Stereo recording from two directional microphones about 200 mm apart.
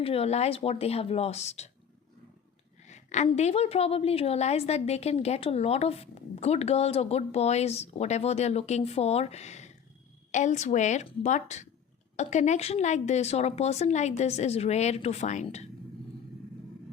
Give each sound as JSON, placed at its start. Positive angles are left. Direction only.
{"t": 0.0, "sound": "a woman's voice", "side_deg": 30}
{"t": 2.8, "sound": "a woman's voice", "side_deg": 35}